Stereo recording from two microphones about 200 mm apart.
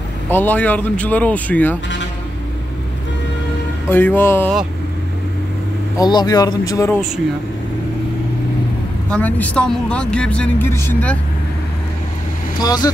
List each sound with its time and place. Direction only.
0.3 s speech: 10° left (ahead or behind)
3.9 s speech: 10° left (ahead or behind)
5.9 s speech: 20° left (ahead or behind)
9.1 s speech: 5° left (ahead or behind)
12.5 s speech: 20° left (ahead or behind)